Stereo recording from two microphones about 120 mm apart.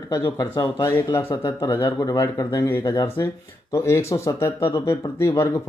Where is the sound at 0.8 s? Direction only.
25° left (ahead or behind).